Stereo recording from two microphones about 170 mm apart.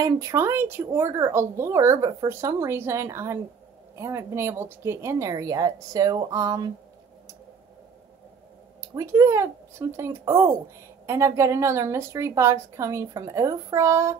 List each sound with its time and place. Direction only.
0.0 s speech: 15° right (ahead or behind)
8.9 s speech: 15° right (ahead or behind)